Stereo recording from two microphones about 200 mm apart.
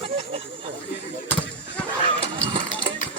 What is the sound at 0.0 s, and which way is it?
Snake, 30° right (ahead or behind).